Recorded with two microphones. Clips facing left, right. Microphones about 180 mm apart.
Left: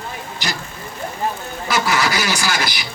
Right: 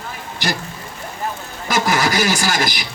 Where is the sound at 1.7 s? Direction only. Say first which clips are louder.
Right 1 dB; 45° right (ahead or behind).